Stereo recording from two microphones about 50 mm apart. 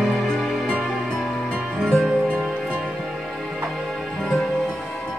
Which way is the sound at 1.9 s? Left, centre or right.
Centre.